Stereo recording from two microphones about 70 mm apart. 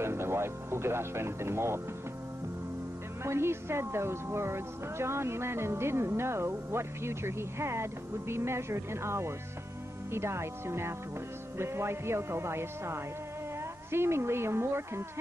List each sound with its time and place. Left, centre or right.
0.0 s speech: right
3.3 s speech: right